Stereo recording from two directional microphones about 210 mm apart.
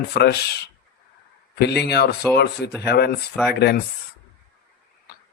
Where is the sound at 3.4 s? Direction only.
5° left (ahead or behind).